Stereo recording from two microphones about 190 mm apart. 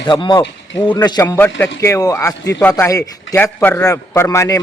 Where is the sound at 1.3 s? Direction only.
10° left (ahead or behind).